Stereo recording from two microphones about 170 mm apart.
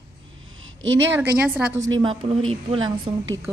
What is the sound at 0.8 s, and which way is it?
Speech, 90° right.